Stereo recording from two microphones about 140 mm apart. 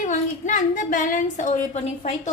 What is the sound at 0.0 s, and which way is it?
A woman's voice, 65° left (ahead or behind).